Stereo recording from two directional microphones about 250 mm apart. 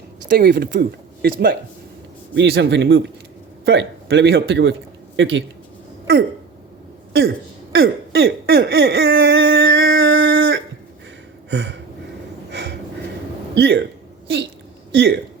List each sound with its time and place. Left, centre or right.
0.3 s speech: right
2.3 s speech: right
7.1 s throat clearing: right
11.5 s a sound: right
12.5 s snort: right
13.6 s speech: right
14.9 s speech: right